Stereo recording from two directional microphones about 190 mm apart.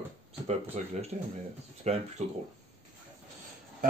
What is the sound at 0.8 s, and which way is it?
Speech, 35° right (ahead or behind).